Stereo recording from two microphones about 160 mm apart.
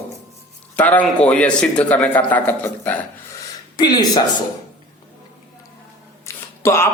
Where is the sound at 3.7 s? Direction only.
25° left (ahead or behind).